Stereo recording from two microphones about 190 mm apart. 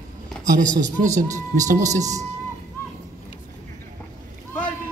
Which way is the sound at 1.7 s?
40° right (ahead or behind).